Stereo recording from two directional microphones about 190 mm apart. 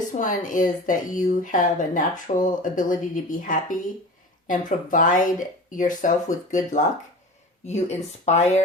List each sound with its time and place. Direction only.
0.2 s speech: 45° left (ahead or behind)